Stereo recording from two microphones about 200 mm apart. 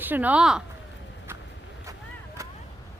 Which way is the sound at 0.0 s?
10° right (ahead or behind).